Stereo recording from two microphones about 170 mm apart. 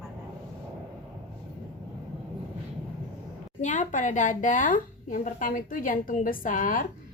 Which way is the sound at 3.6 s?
45° left (ahead or behind).